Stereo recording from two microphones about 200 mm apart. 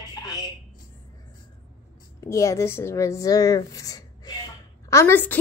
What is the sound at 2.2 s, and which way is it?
A woman's voice, 15° left (ahead or behind).